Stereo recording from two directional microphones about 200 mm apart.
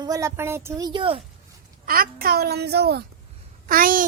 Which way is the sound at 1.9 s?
45° right (ahead or behind).